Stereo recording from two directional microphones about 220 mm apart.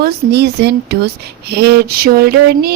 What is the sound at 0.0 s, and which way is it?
Speech, 50° right (ahead or behind).